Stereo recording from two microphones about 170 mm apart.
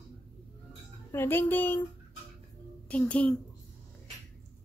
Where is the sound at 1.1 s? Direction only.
10° left (ahead or behind).